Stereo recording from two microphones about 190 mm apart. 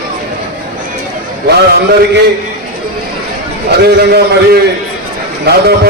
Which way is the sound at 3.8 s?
60° right (ahead or behind).